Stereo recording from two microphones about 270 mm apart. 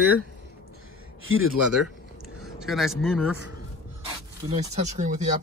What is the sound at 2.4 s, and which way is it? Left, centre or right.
Speech, centre.